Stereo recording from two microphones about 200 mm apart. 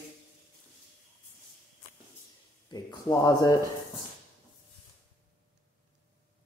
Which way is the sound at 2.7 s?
25° left (ahead or behind).